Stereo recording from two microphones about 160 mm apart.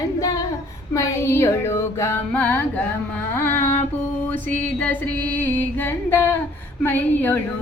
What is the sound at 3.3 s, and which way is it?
Music, 15° left (ahead or behind).